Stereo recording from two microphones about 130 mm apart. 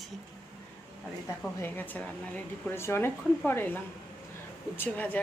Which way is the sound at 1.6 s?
15° left (ahead or behind).